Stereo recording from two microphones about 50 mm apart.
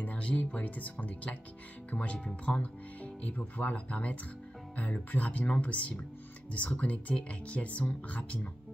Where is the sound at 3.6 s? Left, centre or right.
Left.